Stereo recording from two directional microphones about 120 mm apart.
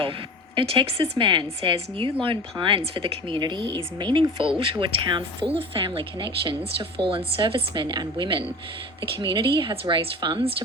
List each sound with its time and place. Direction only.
0.5 s speech: 50° right (ahead or behind)